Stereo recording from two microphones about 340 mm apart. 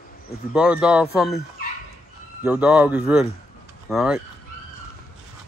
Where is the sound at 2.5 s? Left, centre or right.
Centre.